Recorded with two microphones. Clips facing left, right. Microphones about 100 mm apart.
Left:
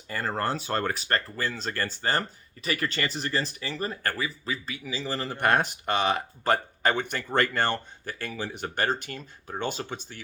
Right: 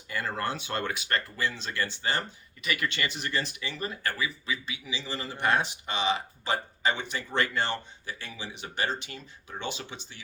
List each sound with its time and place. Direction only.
0.1 s speech: 40° left (ahead or behind)